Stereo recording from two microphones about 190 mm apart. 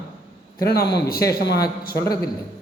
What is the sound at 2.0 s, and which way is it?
Speech, 20° left (ahead or behind).